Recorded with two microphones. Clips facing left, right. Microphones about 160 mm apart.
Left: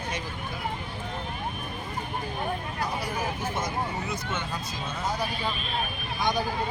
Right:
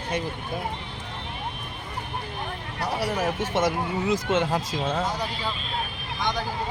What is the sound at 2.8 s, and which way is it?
Speech, 75° right (ahead or behind).